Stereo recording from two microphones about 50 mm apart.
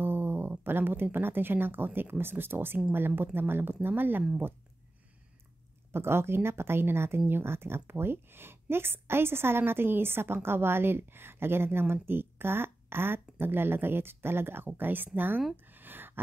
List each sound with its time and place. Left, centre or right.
0.0 s speech: right
5.9 s speech: right
15.5 s a sound: right